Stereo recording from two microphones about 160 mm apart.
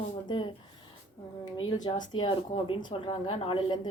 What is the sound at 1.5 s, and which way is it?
A woman's voice, 35° left (ahead or behind).